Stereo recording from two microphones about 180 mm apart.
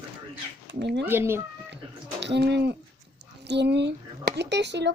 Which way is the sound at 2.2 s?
70° right (ahead or behind).